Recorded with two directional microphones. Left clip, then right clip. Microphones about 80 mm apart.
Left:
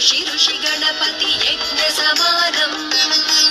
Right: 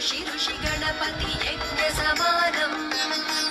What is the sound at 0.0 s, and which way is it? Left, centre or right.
Music, left.